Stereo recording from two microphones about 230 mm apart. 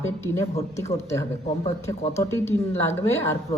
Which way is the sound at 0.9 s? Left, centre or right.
Centre.